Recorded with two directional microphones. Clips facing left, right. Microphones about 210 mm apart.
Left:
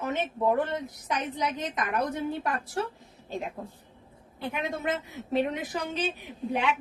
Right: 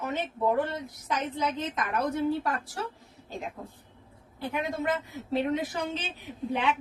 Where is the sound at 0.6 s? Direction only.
20° left (ahead or behind).